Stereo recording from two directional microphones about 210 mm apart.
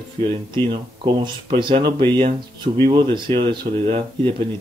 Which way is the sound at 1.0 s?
20° right (ahead or behind).